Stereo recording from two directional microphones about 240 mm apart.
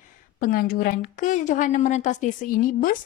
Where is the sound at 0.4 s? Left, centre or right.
Left.